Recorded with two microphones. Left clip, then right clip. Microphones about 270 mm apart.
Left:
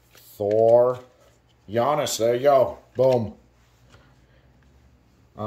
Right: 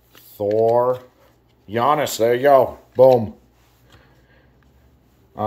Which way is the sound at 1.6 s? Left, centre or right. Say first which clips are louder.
Right 4 dB; centre.